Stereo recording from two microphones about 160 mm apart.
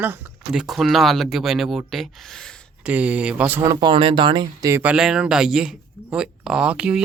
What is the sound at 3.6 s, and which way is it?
Speech, 25° right (ahead or behind).